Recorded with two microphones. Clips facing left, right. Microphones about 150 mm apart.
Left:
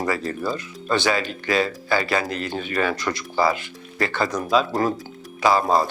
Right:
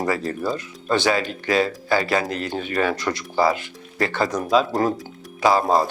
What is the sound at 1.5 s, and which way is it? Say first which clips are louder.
Speech: right 2 dB; 35° right (ahead or behind).